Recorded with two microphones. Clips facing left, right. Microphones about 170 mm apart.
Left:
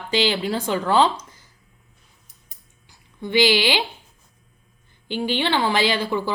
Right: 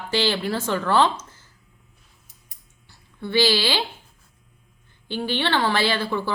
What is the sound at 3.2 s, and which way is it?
Speech, 15° left (ahead or behind).